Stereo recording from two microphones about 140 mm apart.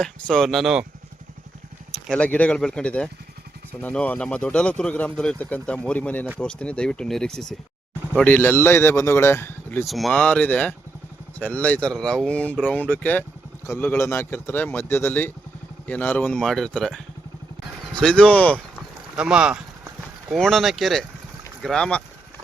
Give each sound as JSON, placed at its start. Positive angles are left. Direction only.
{"t": 0.0, "sound": "speech", "side_deg": 5}
{"t": 1.9, "sound": "speech", "side_deg": 5}
{"t": 9.8, "sound": "speech", "side_deg": 0}
{"t": 19.1, "sound": "a sound", "side_deg": -5}
{"t": 20.3, "sound": "speech", "side_deg": 0}